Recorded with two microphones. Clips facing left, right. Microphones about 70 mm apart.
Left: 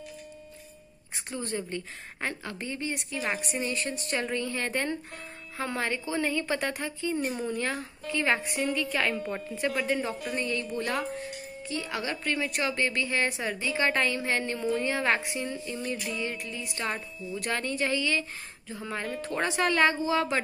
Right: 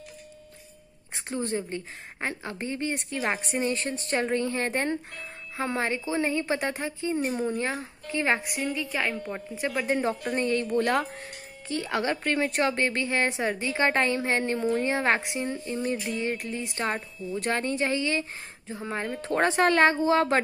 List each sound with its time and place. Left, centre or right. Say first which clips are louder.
1.1 s a woman's voice: right 4 dB; right
8.9 s speech: left 1 dB; centre
9.8 s a woman's voice: right 3 dB; right
10.3 s a woman's voice: right 7 dB; right
15.5 s a woman's voice: right 4 dB; right